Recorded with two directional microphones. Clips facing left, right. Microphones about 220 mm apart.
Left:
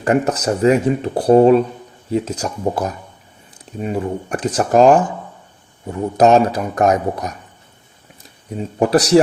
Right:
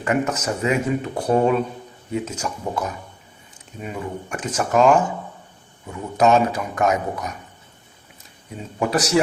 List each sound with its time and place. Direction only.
0.0 s speech: 35° left (ahead or behind)
8.8 s speech: 35° left (ahead or behind)